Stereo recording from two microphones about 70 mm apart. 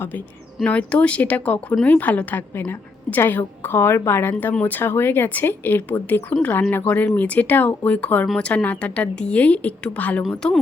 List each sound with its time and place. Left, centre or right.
0.6 s a woman's voice: centre